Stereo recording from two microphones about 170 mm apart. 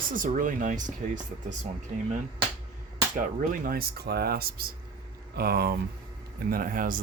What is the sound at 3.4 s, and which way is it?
Speech, 60° right (ahead or behind).